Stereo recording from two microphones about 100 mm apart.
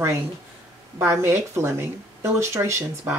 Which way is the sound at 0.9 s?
25° right (ahead or behind).